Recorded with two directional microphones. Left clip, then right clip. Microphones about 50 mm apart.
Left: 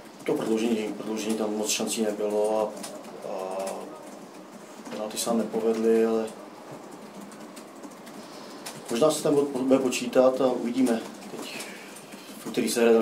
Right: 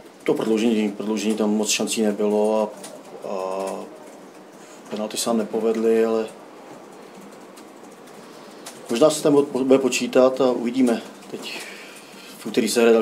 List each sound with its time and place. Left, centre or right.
0.2 s speech: right
5.0 s speech: right
8.9 s speech: right
12.4 s speech: right